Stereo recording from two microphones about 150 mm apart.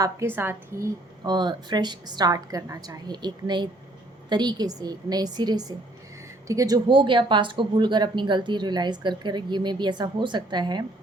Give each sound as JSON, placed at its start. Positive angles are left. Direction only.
{"t": 0.0, "sound": "a woman's voice", "side_deg": -15}
{"t": 6.8, "sound": "speech", "side_deg": -30}